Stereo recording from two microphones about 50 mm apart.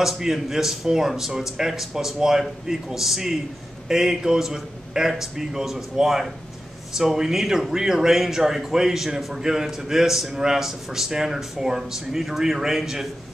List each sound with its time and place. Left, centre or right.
0.0 s speech: centre